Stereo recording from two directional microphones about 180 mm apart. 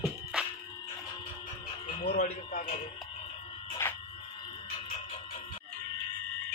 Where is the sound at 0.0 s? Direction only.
5° right (ahead or behind).